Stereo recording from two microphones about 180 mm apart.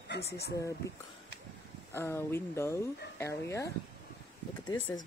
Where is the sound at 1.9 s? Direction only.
15° left (ahead or behind).